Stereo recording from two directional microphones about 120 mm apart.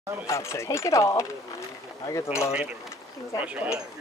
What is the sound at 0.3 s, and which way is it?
Speech, 25° left (ahead or behind).